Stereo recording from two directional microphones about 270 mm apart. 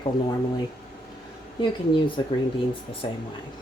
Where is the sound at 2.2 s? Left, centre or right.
Centre.